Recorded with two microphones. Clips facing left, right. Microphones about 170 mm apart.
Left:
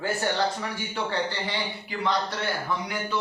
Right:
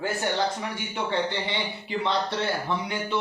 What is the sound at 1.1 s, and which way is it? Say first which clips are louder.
A man's voice: right 3 dB; 25° right (ahead or behind).